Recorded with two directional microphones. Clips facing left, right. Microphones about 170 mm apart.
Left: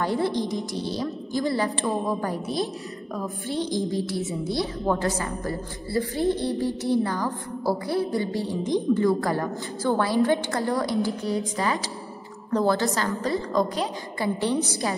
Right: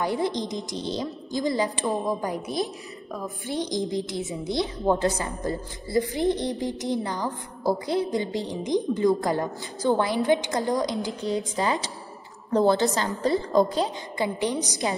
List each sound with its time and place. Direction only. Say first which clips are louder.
0.0 s a woman's voice: left 1 dB; 15° right (ahead or behind)